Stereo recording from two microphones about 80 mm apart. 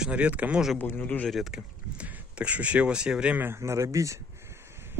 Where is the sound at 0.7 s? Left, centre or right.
Left.